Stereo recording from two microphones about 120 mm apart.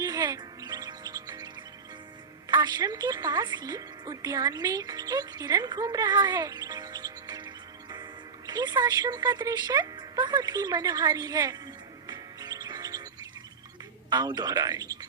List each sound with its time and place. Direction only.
0.0 s music: 35° right (ahead or behind)
2.5 s a woman's voice: 35° right (ahead or behind)
12.0 s music: 35° right (ahead or behind)
14.1 s speech: 35° right (ahead or behind)